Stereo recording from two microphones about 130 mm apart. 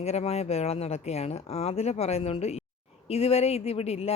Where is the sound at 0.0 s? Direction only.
55° left (ahead or behind).